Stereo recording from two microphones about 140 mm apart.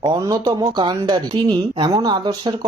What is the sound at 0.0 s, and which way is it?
Speech, 25° right (ahead or behind).